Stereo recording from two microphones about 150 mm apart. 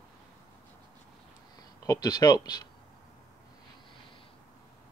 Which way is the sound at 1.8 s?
25° left (ahead or behind).